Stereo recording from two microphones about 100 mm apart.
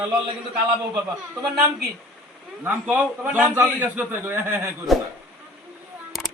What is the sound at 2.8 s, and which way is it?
A man's voice, 15° right (ahead or behind).